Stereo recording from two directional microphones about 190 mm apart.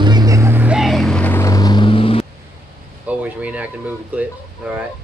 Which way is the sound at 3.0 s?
5° right (ahead or behind).